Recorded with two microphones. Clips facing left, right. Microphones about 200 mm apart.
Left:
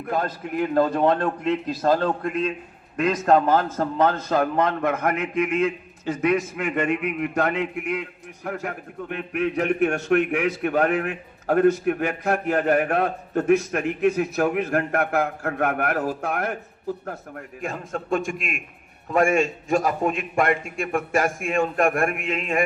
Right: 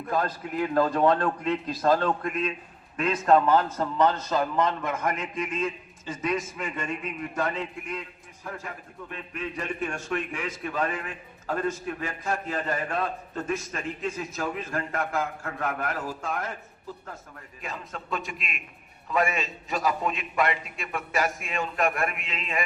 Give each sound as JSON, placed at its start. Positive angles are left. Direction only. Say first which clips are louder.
{"t": 0.1, "sound": "a man's voice", "louder": "left 2 dB", "side_deg": 25}